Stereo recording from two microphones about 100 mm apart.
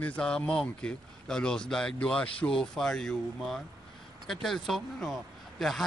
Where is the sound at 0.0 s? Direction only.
10° left (ahead or behind).